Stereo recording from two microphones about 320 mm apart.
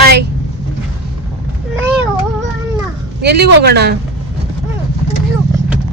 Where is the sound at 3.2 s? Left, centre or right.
Right.